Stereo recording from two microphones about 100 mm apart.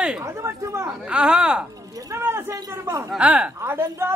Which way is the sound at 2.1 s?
25° right (ahead or behind).